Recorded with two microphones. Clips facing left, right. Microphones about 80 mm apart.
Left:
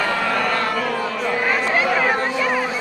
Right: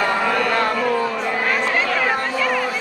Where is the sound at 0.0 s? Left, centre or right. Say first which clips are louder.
Right 2 dB; centre.